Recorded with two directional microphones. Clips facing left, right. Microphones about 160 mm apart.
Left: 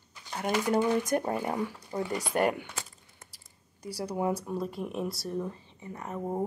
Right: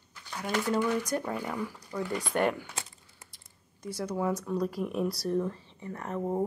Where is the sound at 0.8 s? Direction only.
25° left (ahead or behind).